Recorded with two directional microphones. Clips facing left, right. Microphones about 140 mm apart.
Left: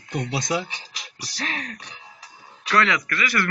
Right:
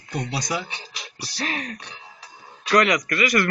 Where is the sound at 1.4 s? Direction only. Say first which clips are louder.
Right 2 dB; 10° right (ahead or behind).